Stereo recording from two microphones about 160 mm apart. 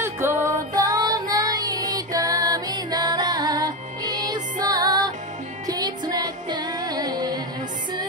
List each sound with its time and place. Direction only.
0.0 s music: 15° right (ahead or behind)